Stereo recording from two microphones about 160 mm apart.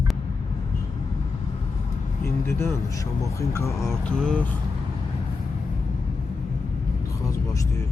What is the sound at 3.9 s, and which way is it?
Mantra, 5° left (ahead or behind).